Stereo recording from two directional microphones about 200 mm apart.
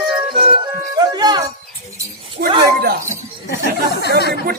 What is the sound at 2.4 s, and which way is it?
Speech, 50° right (ahead or behind).